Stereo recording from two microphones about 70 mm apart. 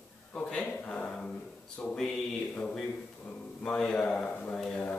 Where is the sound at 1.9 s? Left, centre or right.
Centre.